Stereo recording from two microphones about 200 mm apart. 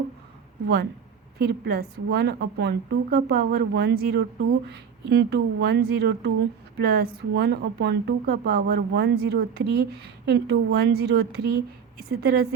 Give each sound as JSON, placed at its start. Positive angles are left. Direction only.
{"t": 1.4, "sound": "a woman's voice", "side_deg": -50}